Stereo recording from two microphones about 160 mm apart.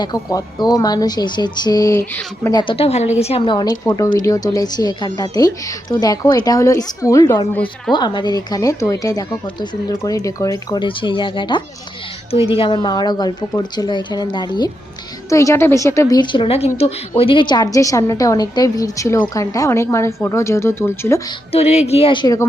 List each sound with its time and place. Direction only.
0.0 s a woman's voice: 25° left (ahead or behind)
2.6 s a woman's voice: 35° left (ahead or behind); by 21.2 s 15° left (ahead or behind)
21.5 s speech: 40° left (ahead or behind)